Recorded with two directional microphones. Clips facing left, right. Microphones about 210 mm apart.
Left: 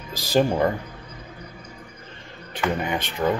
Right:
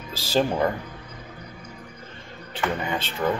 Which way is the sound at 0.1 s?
15° left (ahead or behind).